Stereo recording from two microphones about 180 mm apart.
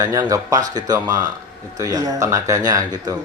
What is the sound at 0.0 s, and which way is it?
Speech, 20° right (ahead or behind).